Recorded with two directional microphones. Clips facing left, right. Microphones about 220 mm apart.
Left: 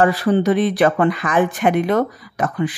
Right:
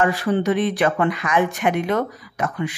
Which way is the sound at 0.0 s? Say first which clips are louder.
Left 4 dB; 35° left (ahead or behind).